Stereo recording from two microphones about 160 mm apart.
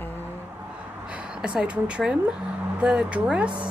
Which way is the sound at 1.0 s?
5° right (ahead or behind).